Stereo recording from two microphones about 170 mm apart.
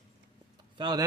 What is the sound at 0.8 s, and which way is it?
Speech, 25° right (ahead or behind).